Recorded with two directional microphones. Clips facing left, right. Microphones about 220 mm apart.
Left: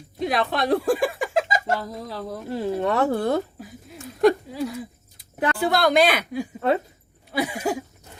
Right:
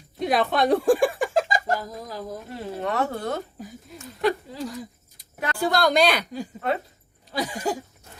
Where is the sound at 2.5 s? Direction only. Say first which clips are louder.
Left 6 dB; 30° left (ahead or behind).